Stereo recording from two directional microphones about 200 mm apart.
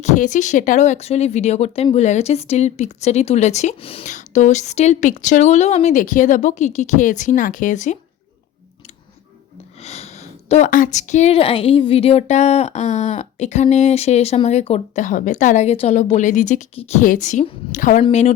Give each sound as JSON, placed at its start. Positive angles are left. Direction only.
{"t": 0.0, "sound": "a woman's voice", "side_deg": 40}
{"t": 9.8, "sound": "a woman's voice", "side_deg": 30}